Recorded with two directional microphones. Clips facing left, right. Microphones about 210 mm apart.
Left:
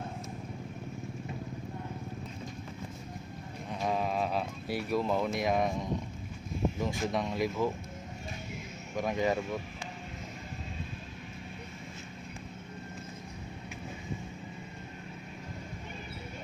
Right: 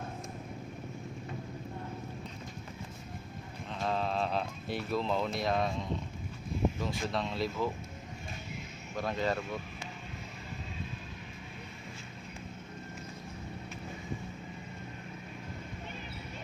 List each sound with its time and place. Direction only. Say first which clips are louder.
3.7 s a sound: left 1 dB; 15° left (ahead or behind)
6.7 s speech: left 3 dB; 15° left (ahead or behind)
9.0 s speech: left 3 dB; 15° left (ahead or behind)